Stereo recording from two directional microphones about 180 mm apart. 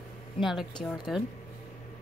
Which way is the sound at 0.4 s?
Centre (ahead or behind).